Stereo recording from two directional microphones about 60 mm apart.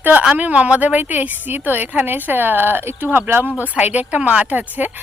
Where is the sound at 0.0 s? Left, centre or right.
Right.